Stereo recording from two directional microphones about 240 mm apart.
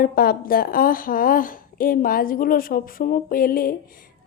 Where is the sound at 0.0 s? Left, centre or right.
Left.